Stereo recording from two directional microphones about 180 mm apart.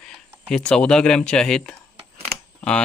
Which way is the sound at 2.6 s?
5° left (ahead or behind).